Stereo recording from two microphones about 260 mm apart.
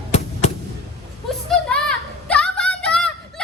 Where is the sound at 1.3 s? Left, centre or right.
Centre.